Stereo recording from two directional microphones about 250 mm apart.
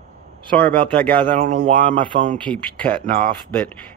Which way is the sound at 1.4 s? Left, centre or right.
Right.